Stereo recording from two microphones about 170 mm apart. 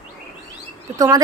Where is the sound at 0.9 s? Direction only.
20° right (ahead or behind).